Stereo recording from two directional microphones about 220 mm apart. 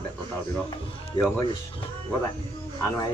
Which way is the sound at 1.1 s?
20° left (ahead or behind).